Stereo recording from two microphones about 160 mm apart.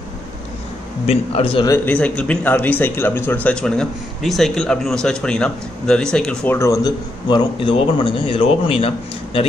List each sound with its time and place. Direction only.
1.0 s a man's voice: 40° left (ahead or behind)
1.7 s speech: 10° left (ahead or behind)
6.5 s a man's voice: 20° left (ahead or behind); by 9.5 s 35° left (ahead or behind)